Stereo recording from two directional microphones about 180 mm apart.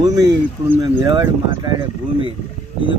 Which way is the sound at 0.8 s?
25° right (ahead or behind).